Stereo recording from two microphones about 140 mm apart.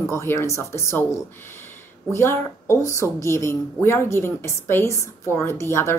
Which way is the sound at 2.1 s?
20° left (ahead or behind).